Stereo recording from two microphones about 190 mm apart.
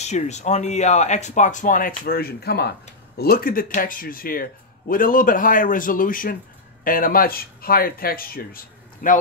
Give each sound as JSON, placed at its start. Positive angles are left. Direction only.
{"t": 0.0, "sound": "speech", "side_deg": 35}